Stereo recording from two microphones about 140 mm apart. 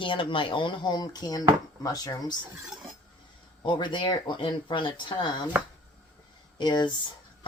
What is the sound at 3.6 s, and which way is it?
Speech, 35° left (ahead or behind).